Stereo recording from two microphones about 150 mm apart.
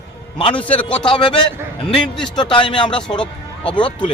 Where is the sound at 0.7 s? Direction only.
35° left (ahead or behind).